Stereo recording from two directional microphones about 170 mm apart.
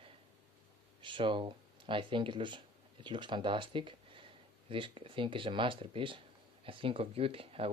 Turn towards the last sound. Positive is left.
turn(degrees=-35)  # may be behind; listen again after turning